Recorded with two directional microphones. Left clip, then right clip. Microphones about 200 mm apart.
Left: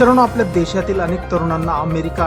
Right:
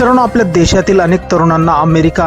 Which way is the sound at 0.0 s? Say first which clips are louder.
Right 3 dB; 35° right (ahead or behind).